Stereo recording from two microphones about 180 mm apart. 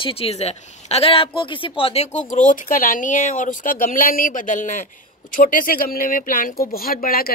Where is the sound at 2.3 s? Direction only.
45° left (ahead or behind).